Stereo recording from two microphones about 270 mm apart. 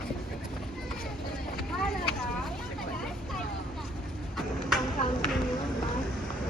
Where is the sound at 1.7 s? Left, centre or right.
Centre.